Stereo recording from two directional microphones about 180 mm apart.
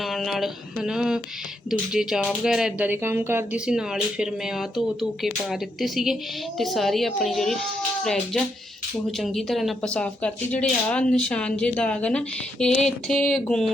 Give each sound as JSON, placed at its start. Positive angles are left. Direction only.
{"t": 0.0, "sound": "speech", "side_deg": 0}